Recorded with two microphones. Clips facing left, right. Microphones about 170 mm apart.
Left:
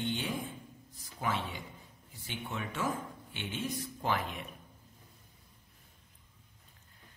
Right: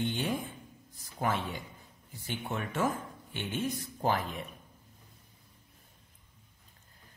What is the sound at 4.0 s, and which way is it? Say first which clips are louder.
Speech: right 3 dB; 40° right (ahead or behind).